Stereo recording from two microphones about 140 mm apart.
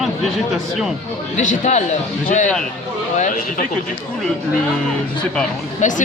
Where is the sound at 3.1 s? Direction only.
60° left (ahead or behind).